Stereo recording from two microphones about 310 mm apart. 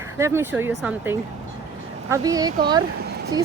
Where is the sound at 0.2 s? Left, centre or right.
Centre.